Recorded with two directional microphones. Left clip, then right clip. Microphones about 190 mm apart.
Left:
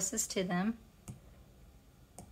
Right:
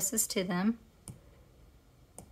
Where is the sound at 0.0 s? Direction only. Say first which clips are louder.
Right 3 dB; 20° right (ahead or behind).